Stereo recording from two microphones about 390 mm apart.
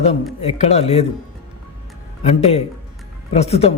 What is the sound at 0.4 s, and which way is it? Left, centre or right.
Speech, centre.